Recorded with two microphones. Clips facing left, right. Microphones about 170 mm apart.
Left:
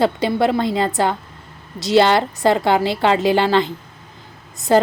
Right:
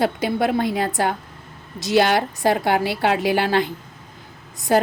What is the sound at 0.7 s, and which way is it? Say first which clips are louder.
Speech: left 3 dB; 90° left.